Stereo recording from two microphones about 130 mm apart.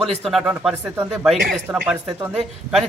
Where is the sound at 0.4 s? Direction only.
10° right (ahead or behind).